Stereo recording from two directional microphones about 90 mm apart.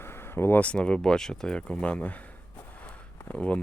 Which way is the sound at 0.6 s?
10° left (ahead or behind).